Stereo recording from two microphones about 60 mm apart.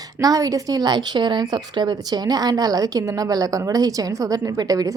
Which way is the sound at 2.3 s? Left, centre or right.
Right.